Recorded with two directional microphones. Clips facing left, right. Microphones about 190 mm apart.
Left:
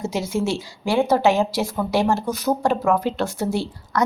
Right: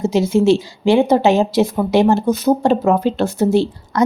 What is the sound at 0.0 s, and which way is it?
A woman's voice, 20° right (ahead or behind).